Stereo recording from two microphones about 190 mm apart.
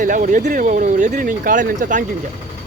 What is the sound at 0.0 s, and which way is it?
Speech, 45° right (ahead or behind).